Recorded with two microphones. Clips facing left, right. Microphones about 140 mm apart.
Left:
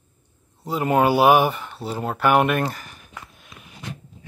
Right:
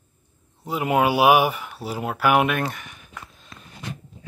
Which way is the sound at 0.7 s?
5° right (ahead or behind).